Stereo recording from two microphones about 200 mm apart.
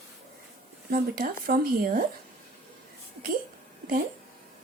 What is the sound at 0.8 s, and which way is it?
Speech, 45° right (ahead or behind).